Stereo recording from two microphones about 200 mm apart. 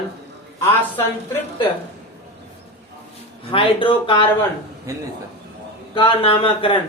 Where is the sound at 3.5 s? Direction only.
25° left (ahead or behind).